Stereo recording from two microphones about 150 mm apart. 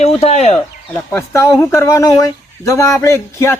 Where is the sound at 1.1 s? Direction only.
15° left (ahead or behind).